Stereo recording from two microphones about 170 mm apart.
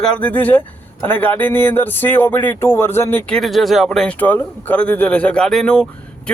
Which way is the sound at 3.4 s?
Centre (ahead or behind).